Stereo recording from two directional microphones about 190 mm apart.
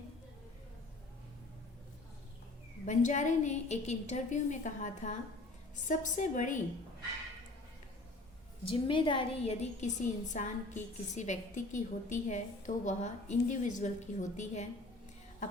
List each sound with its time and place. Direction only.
2.8 s a woman's voice: 40° left (ahead or behind)
8.6 s a woman's voice: 25° left (ahead or behind)